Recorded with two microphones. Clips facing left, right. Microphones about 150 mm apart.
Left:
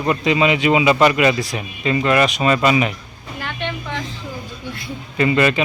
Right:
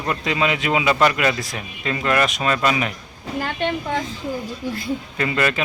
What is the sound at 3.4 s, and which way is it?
Speech, 40° right (ahead or behind).